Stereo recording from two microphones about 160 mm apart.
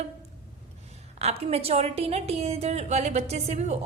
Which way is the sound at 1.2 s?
40° right (ahead or behind).